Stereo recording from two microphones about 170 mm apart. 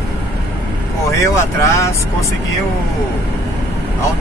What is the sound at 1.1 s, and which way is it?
Speech, 15° left (ahead or behind).